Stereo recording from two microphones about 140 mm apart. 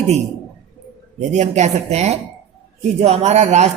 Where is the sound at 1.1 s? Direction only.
55° right (ahead or behind).